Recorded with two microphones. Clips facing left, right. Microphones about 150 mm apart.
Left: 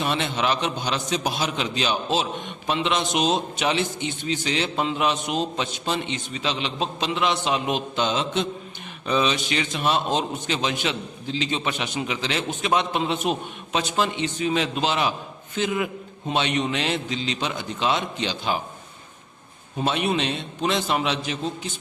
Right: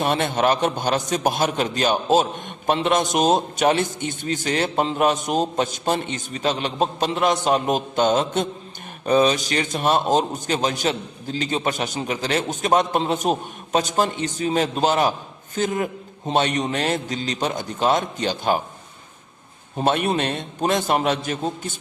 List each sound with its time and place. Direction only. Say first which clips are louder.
0.0 s a man's voice: right 4 dB; 50° right (ahead or behind)
19.8 s a man's voice: right 3 dB; 50° right (ahead or behind)